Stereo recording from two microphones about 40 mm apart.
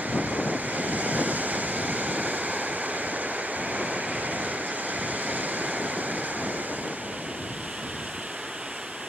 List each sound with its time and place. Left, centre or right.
0.1 s waves: right